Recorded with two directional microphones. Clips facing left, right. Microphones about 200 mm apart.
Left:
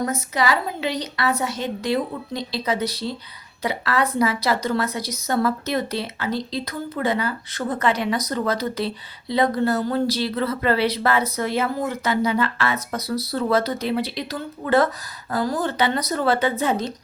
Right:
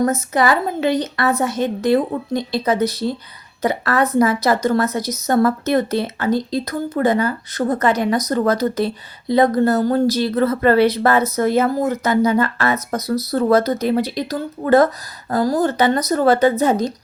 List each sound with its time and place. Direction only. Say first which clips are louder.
0.0 s a woman's voice: right 6 dB; 50° right (ahead or behind)